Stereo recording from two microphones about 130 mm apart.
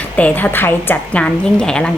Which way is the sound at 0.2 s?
10° left (ahead or behind).